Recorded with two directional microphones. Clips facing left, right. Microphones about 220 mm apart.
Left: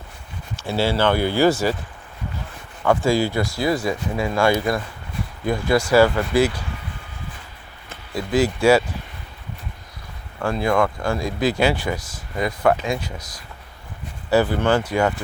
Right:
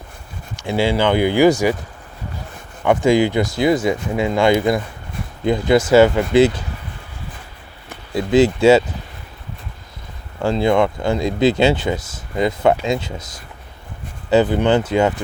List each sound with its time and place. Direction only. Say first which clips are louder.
0.5 s speech: right 3 dB; 15° right (ahead or behind)
2.8 s speech: right 4 dB; 20° right (ahead or behind)
7.9 s speech: right 6 dB; 25° right (ahead or behind)
10.4 s speech: right 4 dB; 25° right (ahead or behind)